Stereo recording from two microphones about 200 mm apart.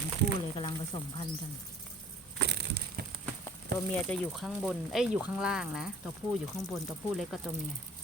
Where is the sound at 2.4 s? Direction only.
55° right (ahead or behind).